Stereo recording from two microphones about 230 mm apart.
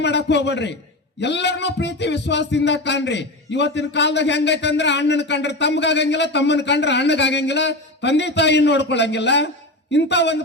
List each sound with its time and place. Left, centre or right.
0.0 s speech: left